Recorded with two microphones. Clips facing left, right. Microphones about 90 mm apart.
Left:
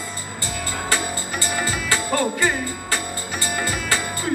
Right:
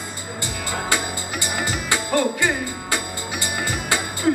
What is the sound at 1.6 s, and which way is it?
Music, 20° right (ahead or behind).